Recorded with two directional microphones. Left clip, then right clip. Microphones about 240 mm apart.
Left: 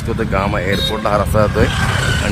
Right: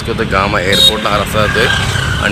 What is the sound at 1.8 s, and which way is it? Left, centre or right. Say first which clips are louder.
Speech: right 2 dB; right.